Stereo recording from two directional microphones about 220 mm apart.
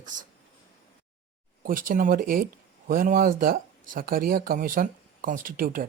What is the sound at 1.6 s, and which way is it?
Speech, 40° right (ahead or behind).